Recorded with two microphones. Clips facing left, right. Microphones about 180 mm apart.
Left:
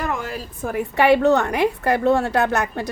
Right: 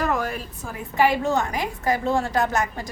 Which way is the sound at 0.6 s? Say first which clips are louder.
Left 4 dB; 65° left (ahead or behind).